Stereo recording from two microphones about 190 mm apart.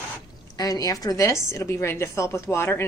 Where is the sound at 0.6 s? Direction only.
20° left (ahead or behind).